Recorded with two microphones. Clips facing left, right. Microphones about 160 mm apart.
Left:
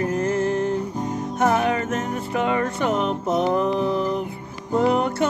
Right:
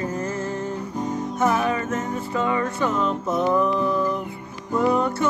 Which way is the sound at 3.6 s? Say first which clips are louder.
Left 1 dB; 85° left.